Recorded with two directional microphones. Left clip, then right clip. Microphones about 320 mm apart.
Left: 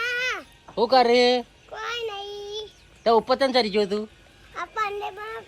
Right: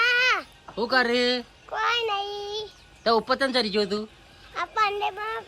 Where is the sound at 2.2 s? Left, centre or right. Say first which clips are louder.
Right 2 dB; centre.